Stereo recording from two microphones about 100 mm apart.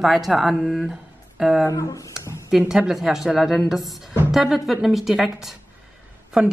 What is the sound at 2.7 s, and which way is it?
A woman's voice, 5° right (ahead or behind).